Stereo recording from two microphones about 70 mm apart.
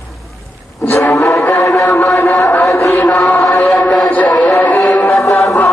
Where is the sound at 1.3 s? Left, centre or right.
Left.